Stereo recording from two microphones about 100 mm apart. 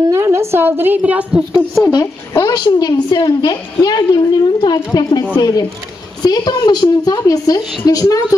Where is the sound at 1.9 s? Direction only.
35° left (ahead or behind).